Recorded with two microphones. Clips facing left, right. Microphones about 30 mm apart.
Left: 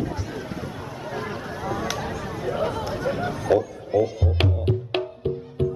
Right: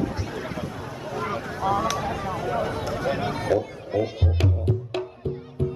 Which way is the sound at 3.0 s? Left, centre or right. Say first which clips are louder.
Right 1 dB; right.